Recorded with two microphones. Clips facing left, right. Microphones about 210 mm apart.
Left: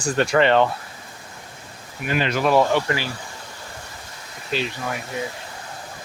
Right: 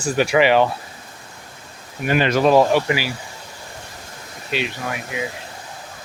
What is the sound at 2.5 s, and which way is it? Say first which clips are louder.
Speech: right 3 dB; 15° right (ahead or behind).